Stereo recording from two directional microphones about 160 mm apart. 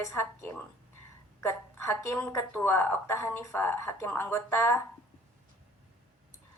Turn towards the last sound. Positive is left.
turn(degrees=15)  # may be behind; listen again after turning